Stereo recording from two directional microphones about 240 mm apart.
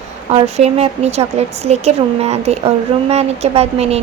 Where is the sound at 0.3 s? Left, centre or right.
Right.